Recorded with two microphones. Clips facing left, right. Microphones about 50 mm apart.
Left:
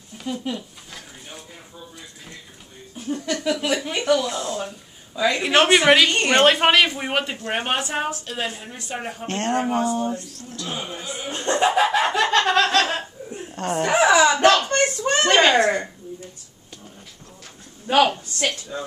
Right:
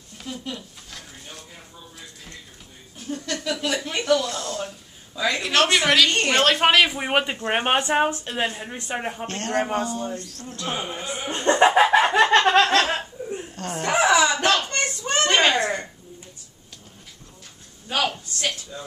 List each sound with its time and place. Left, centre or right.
0.2 s a sound: centre
3.3 s speech: centre
4.6 s a sound: centre
5.4 s a woman's voice: centre
6.9 s a man's voice: centre
9.3 s speech: left
10.5 s speech: right
11.3 s chuckle: right
13.6 s a sound: centre; by 15.6 s left
18.7 s speech: left